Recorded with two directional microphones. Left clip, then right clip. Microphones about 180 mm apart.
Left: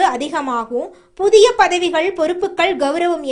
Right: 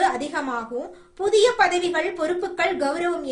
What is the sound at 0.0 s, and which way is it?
A woman's voice, 35° left (ahead or behind).